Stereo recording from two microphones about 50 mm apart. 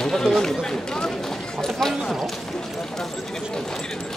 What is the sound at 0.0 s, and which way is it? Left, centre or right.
Speech, centre.